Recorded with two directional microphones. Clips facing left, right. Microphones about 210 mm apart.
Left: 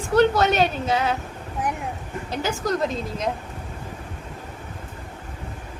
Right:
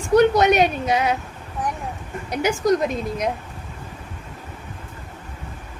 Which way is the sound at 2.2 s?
15° right (ahead or behind).